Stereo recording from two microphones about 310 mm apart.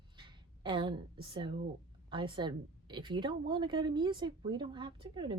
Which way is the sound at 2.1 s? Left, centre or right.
Centre.